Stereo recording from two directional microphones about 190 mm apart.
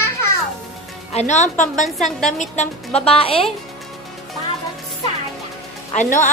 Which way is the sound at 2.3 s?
40° left (ahead or behind).